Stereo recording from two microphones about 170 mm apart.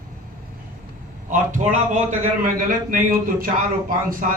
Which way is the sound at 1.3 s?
50° right (ahead or behind).